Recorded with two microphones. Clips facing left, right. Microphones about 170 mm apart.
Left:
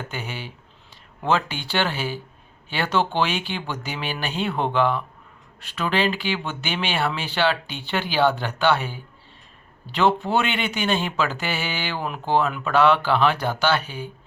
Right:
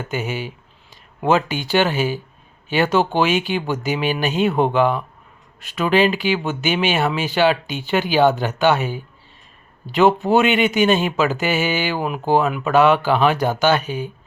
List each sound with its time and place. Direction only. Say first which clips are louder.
0.1 s speech: right 8 dB; 15° right (ahead or behind)